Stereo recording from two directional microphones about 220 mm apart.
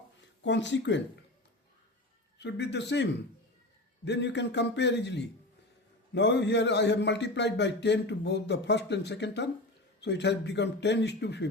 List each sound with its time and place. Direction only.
0.2 s speech: 55° left (ahead or behind)
2.4 s a man's voice: 50° left (ahead or behind)